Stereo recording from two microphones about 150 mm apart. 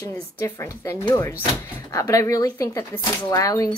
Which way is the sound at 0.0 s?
20° left (ahead or behind).